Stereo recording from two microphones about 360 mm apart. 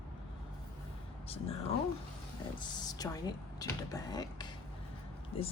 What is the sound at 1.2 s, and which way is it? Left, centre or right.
Speech, centre.